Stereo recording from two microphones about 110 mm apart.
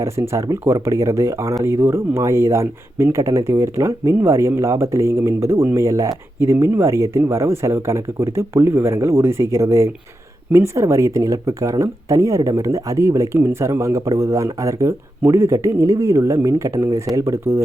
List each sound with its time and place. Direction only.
0.0 s speech: 25° right (ahead or behind)